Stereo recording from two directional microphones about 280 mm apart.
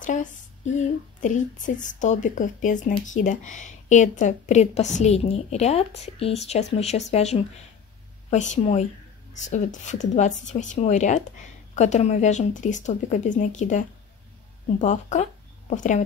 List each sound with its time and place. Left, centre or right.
0.0 s speech: left